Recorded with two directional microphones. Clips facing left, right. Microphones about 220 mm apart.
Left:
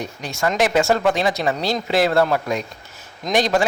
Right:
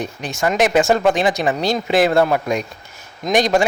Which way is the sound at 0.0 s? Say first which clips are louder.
Right 2 dB; 20° right (ahead or behind).